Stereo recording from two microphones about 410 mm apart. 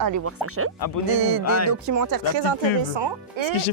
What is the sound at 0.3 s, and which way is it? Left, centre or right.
Speech, right.